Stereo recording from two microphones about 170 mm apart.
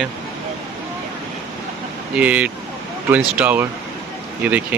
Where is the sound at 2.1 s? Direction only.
10° right (ahead or behind).